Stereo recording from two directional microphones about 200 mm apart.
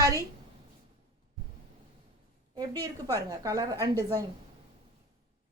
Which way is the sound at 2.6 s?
20° right (ahead or behind).